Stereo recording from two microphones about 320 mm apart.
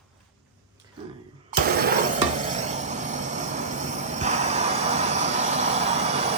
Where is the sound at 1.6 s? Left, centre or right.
Right.